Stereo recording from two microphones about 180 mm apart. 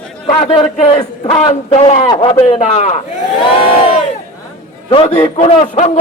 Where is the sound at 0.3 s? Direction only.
35° left (ahead or behind).